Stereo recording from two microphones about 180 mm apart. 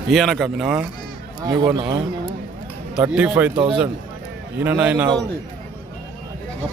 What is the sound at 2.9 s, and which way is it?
Speech, 5° right (ahead or behind).